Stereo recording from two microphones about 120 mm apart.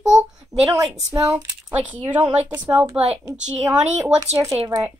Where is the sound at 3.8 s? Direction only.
70° right (ahead or behind).